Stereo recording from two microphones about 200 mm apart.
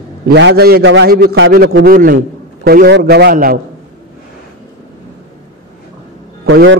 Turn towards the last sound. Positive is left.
turn(degrees=-60)  # may be behind; listen again after turning